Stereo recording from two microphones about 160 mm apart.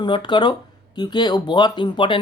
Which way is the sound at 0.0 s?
30° left (ahead or behind).